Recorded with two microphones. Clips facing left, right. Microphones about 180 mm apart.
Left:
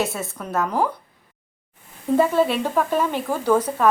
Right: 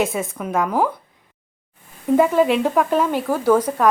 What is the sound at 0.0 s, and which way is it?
Speech, 90° right.